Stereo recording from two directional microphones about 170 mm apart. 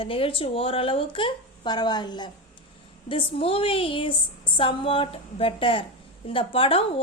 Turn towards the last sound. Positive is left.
turn(degrees=35)  # may be behind; listen again after turning